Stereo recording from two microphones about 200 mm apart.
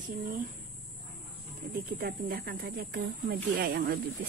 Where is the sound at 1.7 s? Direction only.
50° right (ahead or behind).